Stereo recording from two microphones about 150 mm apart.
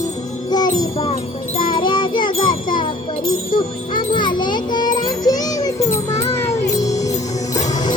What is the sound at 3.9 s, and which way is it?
Children playing, 30° left (ahead or behind).